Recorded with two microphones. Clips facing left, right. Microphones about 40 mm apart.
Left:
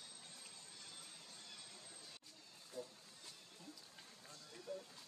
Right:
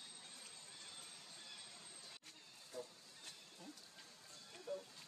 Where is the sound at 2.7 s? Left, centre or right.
Right.